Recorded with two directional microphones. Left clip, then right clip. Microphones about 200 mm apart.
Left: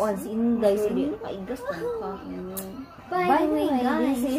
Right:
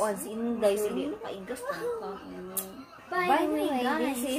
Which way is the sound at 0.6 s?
15° right (ahead or behind).